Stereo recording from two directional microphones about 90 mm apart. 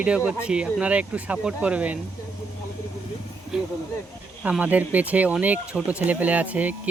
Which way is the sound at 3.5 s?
5° right (ahead or behind).